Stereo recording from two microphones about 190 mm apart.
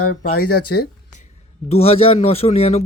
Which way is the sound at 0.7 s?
60° left (ahead or behind).